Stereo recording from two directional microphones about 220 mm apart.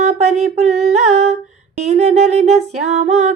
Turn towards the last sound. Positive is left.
turn(degrees=-30)  # may be behind; listen again after turning